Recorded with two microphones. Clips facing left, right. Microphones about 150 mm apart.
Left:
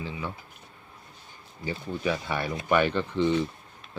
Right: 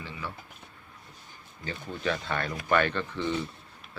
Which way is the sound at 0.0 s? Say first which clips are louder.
Left 5 dB; 15° left (ahead or behind).